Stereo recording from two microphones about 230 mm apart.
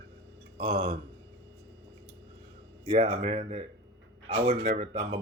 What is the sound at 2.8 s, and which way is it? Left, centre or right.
Speech, right.